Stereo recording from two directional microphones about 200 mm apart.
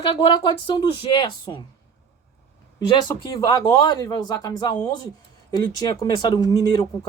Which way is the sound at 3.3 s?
20° left (ahead or behind).